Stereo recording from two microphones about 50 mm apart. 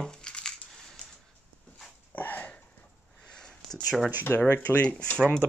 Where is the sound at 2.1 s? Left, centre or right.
Left.